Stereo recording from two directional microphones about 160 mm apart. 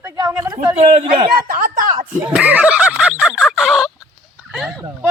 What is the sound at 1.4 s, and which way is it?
Speech, 60° right (ahead or behind).